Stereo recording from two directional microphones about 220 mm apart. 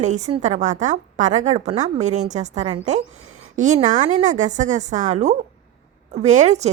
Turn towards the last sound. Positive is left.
turn(degrees=-30)  # may be behind; listen again after turning